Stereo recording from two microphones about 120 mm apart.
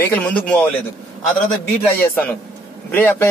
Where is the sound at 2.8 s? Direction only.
15° left (ahead or behind).